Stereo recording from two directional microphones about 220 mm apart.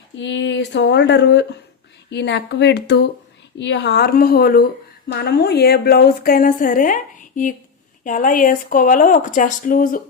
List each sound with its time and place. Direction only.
0.2 s a woman's voice: 55° left (ahead or behind); by 10.0 s 40° left (ahead or behind)